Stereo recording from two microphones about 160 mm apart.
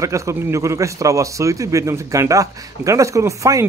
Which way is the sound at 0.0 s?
20° right (ahead or behind).